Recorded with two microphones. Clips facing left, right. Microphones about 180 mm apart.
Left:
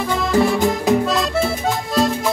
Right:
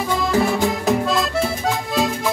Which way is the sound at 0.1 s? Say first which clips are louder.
Left 2 dB; centre (ahead or behind).